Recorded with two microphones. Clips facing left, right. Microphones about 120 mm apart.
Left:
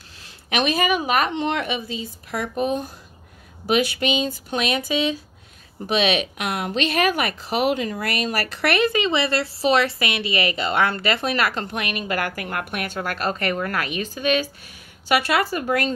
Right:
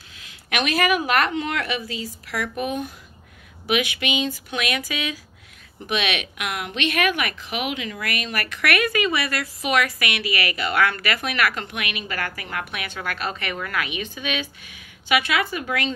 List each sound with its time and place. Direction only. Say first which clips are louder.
0.2 s a sound: left 3 dB; 35° left (ahead or behind)
0.7 s a woman's voice: right 1 dB; 20° left (ahead or behind)
1.9 s a woman's voice: left 1 dB; 80° right
2.3 s speech: left 3 dB; 30° left (ahead or behind)